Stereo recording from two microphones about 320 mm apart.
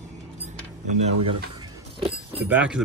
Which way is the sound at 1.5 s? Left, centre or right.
Centre.